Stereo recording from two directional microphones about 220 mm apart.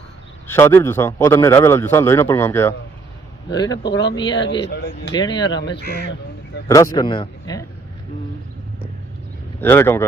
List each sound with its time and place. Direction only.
0.4 s a man's voice: 10° left (ahead or behind)
4.4 s speech: 50° left (ahead or behind)
5.2 s speech: 20° left (ahead or behind)
5.5 s speech: 50° left (ahead or behind)
6.7 s a man's voice: 15° left (ahead or behind)
9.6 s a man's voice: 10° left (ahead or behind)